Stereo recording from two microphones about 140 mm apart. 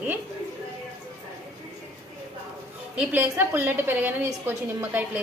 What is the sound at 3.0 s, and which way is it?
A woman's voice, 15° right (ahead or behind).